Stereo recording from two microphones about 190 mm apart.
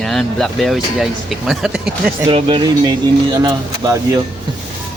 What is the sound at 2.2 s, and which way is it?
Speech, 25° right (ahead or behind).